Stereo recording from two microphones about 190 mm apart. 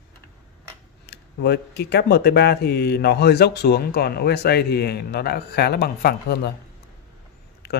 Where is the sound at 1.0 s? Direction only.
60° left (ahead or behind).